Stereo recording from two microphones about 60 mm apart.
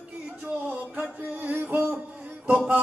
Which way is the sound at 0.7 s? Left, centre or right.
Right.